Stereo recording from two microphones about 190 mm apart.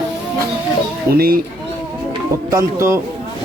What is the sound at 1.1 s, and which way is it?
Speech, 50° right (ahead or behind).